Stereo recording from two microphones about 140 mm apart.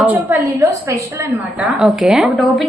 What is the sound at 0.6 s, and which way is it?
A woman's voice, 20° right (ahead or behind).